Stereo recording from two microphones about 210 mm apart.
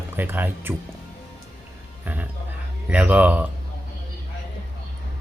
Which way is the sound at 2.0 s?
10° right (ahead or behind).